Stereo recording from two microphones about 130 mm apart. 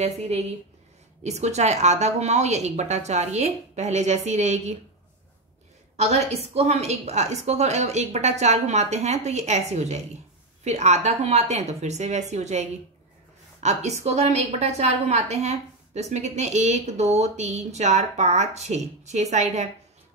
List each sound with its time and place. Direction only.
0.0 s a woman's voice: 55° right (ahead or behind)
5.9 s a woman's voice: 55° right (ahead or behind)